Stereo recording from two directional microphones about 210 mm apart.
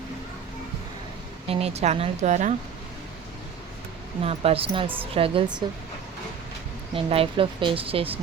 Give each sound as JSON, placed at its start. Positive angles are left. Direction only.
{"t": 1.5, "sound": "speech", "side_deg": -30}
{"t": 4.2, "sound": "speech", "side_deg": -30}
{"t": 6.9, "sound": "speech", "side_deg": -25}